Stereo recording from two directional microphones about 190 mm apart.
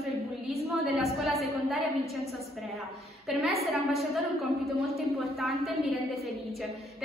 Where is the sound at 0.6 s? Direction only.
Centre (ahead or behind).